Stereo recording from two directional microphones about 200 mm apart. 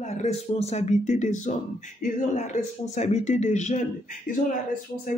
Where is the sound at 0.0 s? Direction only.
35° left (ahead or behind).